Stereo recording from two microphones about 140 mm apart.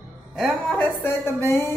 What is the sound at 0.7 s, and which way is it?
A man's voice, 15° left (ahead or behind).